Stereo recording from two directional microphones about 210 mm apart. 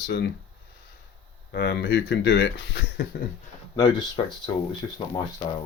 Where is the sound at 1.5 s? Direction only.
50° left (ahead or behind).